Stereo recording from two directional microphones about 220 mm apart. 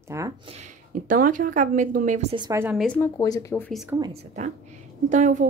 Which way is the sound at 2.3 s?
15° right (ahead or behind).